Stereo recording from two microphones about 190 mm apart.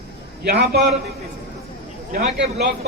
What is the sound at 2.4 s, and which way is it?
Speech, 65° right (ahead or behind).